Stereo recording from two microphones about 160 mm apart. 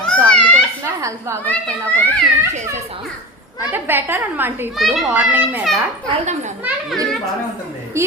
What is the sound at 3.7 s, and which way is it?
Speech, 15° right (ahead or behind).